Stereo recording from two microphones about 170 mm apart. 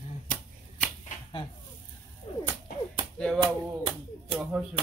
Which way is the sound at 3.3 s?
30° right (ahead or behind).